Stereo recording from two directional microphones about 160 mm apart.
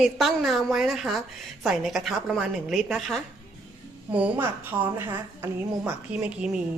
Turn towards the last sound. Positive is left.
turn(degrees=-5)  # may be behind; listen again after turning